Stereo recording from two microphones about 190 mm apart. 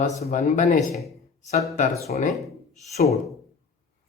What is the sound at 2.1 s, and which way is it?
Speech, 40° left (ahead or behind).